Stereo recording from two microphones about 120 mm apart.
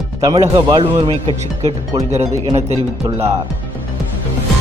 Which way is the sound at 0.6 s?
40° right (ahead or behind).